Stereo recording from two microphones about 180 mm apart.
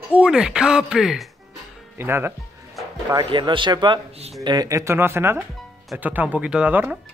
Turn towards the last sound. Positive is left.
turn(degrees=-10)  # may be behind; listen again after turning